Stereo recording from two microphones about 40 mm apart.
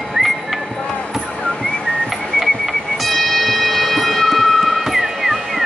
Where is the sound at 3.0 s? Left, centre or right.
Centre.